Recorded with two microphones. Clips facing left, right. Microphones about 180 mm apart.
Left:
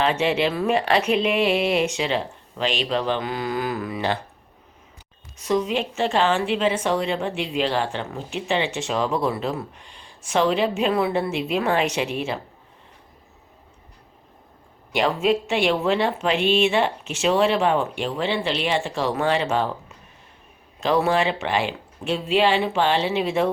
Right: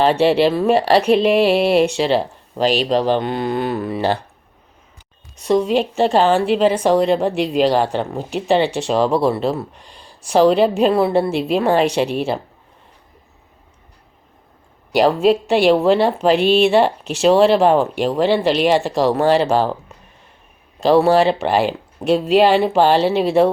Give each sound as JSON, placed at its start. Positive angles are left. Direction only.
{"t": 0.0, "sound": "a woman's voice", "side_deg": -35}
{"t": 5.4, "sound": "a woman's voice", "side_deg": -35}
{"t": 14.9, "sound": "a woman's voice", "side_deg": -35}
{"t": 20.8, "sound": "a woman's voice", "side_deg": -35}